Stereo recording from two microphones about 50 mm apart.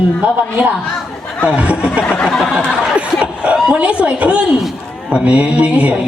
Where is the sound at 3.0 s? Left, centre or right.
Right.